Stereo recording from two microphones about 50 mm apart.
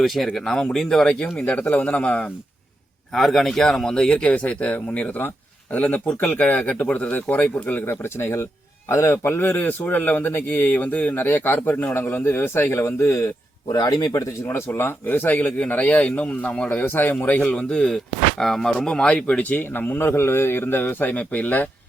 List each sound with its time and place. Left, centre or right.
0.0 s speech: centre
1.5 s speech: left
3.1 s speech: centre; by 8.4 s left
8.9 s a man's voice: left
9.2 s speech: left
14.7 s speech: left
15.4 s speech: left; by 18.7 s centre
18.9 s speech: centre
20.0 s speech: left